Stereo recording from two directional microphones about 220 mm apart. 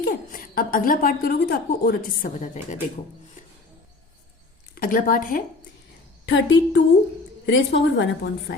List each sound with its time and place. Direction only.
0.0 s a woman's voice: 40° left (ahead or behind)
4.7 s a woman's voice: 40° left (ahead or behind)
6.2 s a woman's voice: 55° left (ahead or behind)